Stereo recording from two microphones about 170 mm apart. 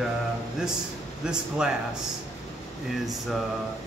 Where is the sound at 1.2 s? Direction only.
5° right (ahead or behind).